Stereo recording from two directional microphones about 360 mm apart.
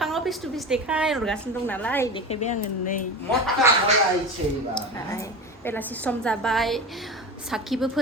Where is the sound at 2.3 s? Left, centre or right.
Centre.